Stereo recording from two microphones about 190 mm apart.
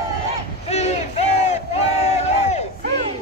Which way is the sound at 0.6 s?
35° left (ahead or behind).